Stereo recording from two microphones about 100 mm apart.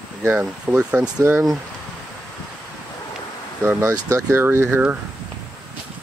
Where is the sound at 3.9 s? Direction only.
30° right (ahead or behind).